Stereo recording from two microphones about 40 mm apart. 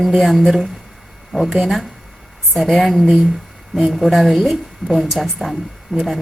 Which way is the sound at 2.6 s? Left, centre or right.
Centre.